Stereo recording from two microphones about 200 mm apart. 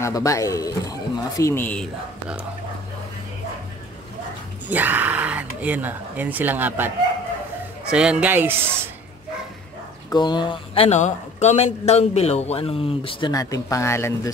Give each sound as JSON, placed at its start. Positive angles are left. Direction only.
{"t": 0.0, "sound": "speech", "side_deg": 15}
{"t": 4.6, "sound": "speech", "side_deg": -10}
{"t": 7.9, "sound": "speech", "side_deg": -5}
{"t": 10.0, "sound": "a man's voice", "side_deg": 20}